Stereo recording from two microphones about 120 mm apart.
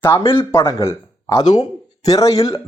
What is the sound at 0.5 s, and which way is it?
A man's voice, 25° left (ahead or behind).